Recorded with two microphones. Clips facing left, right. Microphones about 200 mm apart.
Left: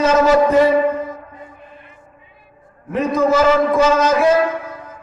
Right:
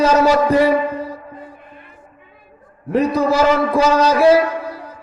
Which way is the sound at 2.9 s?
35° right (ahead or behind).